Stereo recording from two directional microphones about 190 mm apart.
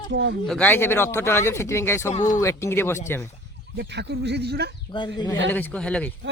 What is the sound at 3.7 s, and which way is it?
Speech, 65° right (ahead or behind).